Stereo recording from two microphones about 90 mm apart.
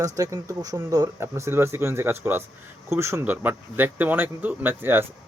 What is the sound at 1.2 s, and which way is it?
Speech, 30° right (ahead or behind).